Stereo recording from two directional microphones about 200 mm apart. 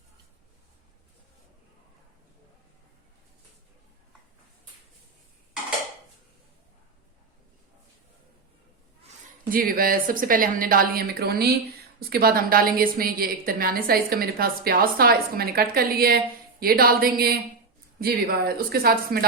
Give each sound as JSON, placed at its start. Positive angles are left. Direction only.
{"t": 9.5, "sound": "a woman's voice", "side_deg": -45}